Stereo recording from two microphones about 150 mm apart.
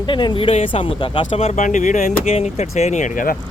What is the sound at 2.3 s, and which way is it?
Speech, 45° left (ahead or behind).